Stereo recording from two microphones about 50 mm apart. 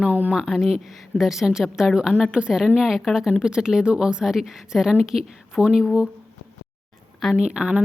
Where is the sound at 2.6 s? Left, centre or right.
Centre.